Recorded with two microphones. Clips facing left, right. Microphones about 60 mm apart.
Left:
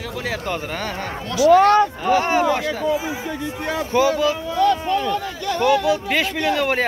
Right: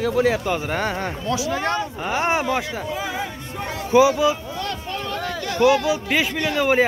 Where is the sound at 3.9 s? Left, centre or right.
Centre.